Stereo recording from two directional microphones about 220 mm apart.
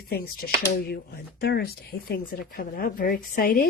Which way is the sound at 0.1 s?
45° left (ahead or behind).